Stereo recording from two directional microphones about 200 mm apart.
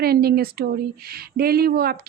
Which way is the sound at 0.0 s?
50° right (ahead or behind).